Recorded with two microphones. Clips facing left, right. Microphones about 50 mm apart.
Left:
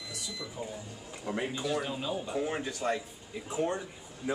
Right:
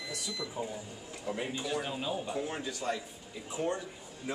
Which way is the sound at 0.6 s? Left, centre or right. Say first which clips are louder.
Right 2 dB; right.